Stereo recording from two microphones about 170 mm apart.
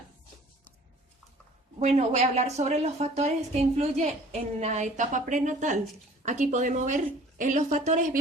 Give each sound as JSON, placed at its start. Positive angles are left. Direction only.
{"t": 1.8, "sound": "a woman's voice", "side_deg": -40}